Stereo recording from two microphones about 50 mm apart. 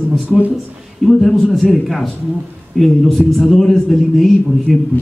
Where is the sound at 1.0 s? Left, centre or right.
Centre.